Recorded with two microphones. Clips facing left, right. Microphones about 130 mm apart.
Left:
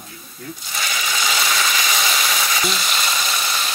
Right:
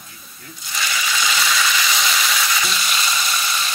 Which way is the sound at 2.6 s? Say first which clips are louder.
Left 1 dB; 45° left (ahead or behind).